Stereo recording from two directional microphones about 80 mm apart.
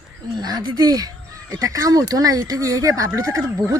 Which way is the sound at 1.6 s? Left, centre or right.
Right.